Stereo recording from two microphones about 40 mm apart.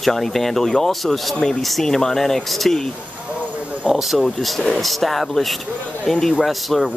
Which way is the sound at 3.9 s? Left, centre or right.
Centre.